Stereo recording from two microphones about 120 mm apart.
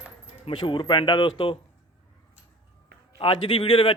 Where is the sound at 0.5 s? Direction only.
40° left (ahead or behind).